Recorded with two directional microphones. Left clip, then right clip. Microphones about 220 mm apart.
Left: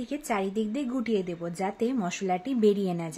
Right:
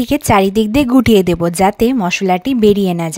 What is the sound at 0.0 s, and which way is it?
A woman's voice, 45° right (ahead or behind).